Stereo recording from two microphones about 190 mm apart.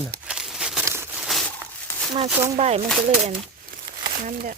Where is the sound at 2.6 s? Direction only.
35° right (ahead or behind).